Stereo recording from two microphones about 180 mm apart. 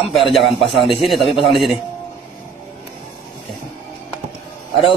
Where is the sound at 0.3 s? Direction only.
Centre (ahead or behind).